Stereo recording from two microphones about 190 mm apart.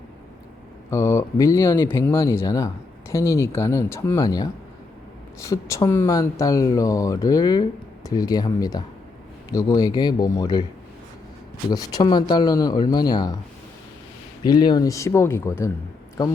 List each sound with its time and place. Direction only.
0.9 s speech: 15° left (ahead or behind)
11.7 s speech: 20° left (ahead or behind)
14.4 s speech: 20° left (ahead or behind)